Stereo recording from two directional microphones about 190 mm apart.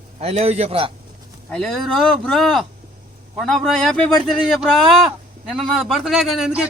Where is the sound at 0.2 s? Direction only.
35° right (ahead or behind).